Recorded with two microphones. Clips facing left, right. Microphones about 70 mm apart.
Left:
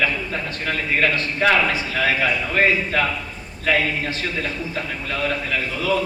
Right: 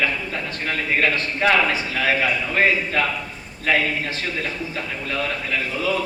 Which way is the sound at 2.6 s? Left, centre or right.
Left.